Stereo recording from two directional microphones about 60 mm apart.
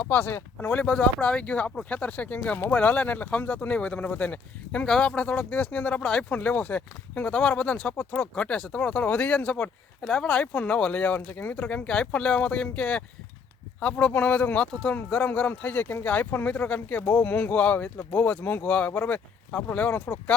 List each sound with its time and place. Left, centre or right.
0.0 s speech: left
0.8 s speech: left